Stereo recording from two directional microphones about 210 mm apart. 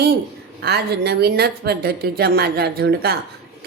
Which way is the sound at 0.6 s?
50° right (ahead or behind).